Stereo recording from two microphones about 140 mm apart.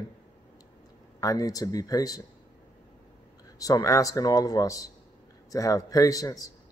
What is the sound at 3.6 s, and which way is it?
A man's voice, 25° left (ahead or behind).